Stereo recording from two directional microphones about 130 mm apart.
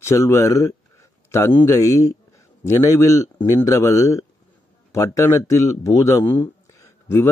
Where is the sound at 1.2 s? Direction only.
20° left (ahead or behind).